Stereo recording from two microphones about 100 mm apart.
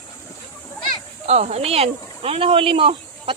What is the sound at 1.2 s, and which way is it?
Speech, 90° right.